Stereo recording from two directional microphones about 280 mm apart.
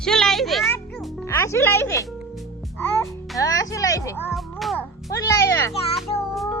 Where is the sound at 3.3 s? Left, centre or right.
Centre.